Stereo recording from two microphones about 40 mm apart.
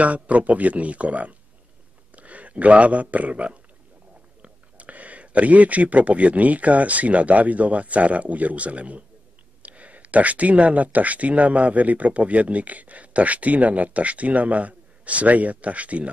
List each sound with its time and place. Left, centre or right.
0.0 s speech: right